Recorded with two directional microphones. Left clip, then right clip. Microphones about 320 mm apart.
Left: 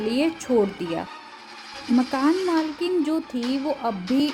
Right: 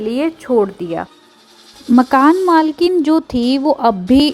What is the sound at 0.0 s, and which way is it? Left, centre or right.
Speech, centre.